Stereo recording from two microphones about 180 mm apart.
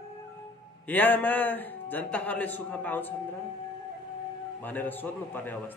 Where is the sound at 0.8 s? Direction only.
10° left (ahead or behind).